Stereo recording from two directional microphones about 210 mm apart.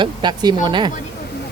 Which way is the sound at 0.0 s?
20° right (ahead or behind).